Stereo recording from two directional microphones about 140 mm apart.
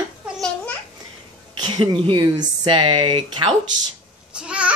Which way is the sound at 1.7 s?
35° right (ahead or behind).